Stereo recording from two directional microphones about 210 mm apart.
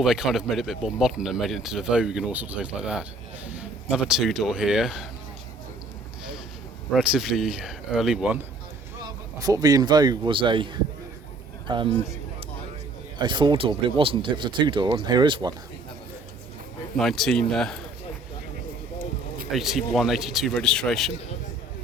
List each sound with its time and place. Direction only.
0.0 s speech: centre (ahead or behind)
6.9 s speech: 5° right (ahead or behind)
9.4 s speech: 15° right (ahead or behind)
13.1 s speech: 20° right (ahead or behind)
17.0 s speech: centre (ahead or behind)
19.5 s speech: centre (ahead or behind)